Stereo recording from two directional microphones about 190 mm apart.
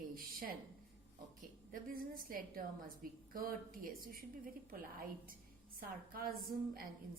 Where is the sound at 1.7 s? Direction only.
50° right (ahead or behind).